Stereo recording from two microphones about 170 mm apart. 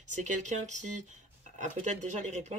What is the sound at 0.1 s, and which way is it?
Speech, 45° right (ahead or behind).